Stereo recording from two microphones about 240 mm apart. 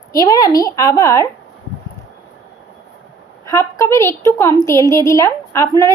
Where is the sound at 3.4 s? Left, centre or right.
Centre.